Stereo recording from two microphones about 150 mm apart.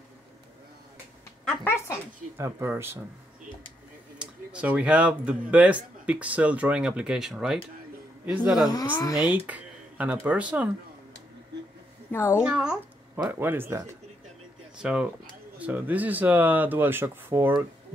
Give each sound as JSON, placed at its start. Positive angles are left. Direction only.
{"t": 1.4, "sound": "a woman's voice", "side_deg": 10}
{"t": 2.3, "sound": "speech", "side_deg": -15}
{"t": 4.2, "sound": "speech", "side_deg": -5}
{"t": 12.1, "sound": "a woman's voice", "side_deg": 15}
{"t": 12.4, "sound": "speech", "side_deg": -5}